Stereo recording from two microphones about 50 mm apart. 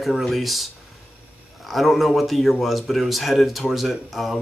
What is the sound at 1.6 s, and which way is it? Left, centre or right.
Speech, centre.